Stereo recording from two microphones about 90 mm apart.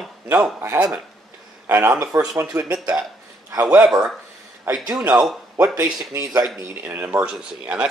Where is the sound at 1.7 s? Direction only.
30° right (ahead or behind).